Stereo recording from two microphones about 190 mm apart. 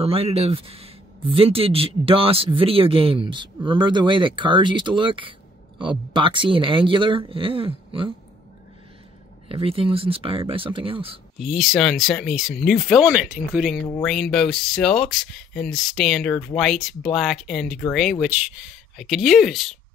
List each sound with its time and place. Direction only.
0.0 s speech: 30° right (ahead or behind)
9.5 s speech: 30° right (ahead or behind)
11.3 s speech: centre (ahead or behind)